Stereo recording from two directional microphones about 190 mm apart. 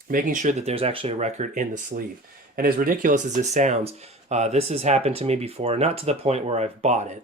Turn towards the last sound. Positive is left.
turn(degrees=-35)  # may be behind; listen again after turning